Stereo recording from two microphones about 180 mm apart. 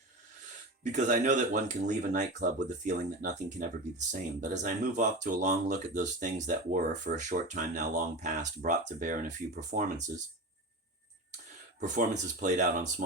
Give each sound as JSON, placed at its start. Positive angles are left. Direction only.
{"t": 0.9, "sound": "speech", "side_deg": -45}
{"t": 11.8, "sound": "speech", "side_deg": -45}